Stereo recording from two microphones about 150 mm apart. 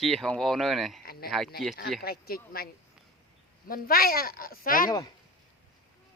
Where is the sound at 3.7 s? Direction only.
80° left.